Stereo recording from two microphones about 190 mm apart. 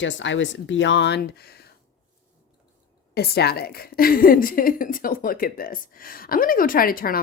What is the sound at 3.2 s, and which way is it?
A woman's voice, 55° left (ahead or behind).